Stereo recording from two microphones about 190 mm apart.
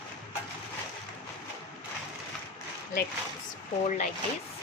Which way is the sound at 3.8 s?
40° left (ahead or behind).